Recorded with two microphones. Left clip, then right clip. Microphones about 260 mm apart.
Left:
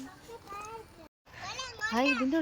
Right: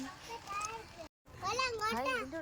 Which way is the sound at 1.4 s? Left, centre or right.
Right.